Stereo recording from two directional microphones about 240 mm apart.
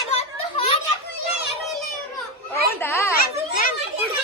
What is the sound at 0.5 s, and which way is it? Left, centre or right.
Children playing, left.